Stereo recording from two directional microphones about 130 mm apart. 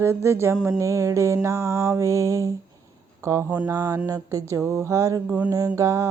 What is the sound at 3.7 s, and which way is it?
Music, 30° right (ahead or behind).